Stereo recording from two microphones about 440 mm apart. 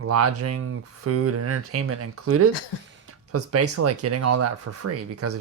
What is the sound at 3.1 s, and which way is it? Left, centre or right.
Speech, right.